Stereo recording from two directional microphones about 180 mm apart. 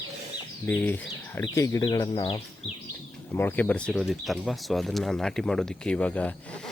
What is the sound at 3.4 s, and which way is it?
Speech, 10° left (ahead or behind).